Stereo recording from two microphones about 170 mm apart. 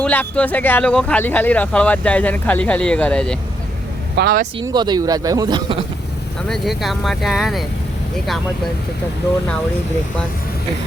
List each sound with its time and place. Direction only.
0.0 s speech: 10° left (ahead or behind)
4.2 s speech: 70° right (ahead or behind)
4.6 s speech: 25° right (ahead or behind)
6.5 s speech: centre (ahead or behind)